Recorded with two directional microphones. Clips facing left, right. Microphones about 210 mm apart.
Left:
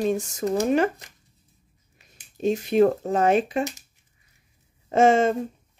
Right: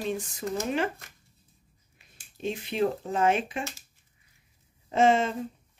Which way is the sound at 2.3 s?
40° left (ahead or behind).